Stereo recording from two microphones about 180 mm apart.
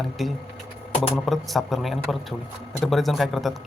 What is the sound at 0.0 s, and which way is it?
Speech, centre (ahead or behind).